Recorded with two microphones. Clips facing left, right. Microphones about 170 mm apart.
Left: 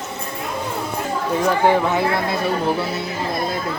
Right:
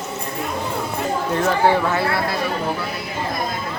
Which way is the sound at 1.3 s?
10° left (ahead or behind).